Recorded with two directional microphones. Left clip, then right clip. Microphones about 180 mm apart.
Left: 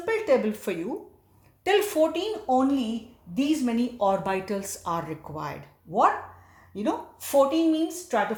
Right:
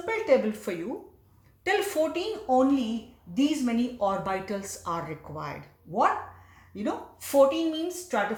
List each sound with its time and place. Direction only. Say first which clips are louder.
0.0 s a woman's voice: left 1 dB; 35° left (ahead or behind)